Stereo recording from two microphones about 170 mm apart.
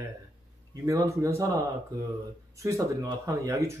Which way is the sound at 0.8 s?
20° right (ahead or behind).